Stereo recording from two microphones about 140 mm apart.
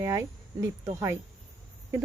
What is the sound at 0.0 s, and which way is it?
Speech, 20° right (ahead or behind).